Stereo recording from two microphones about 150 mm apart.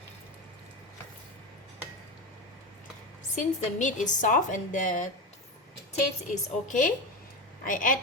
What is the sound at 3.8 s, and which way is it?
A woman's voice, 55° left (ahead or behind).